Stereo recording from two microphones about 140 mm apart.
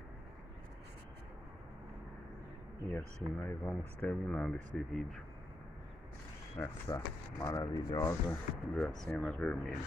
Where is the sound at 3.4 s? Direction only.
5° left (ahead or behind).